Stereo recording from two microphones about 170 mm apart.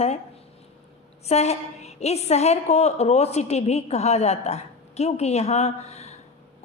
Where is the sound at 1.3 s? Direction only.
40° left (ahead or behind).